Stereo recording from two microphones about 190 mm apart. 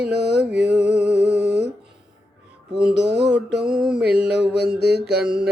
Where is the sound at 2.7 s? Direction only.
5° right (ahead or behind).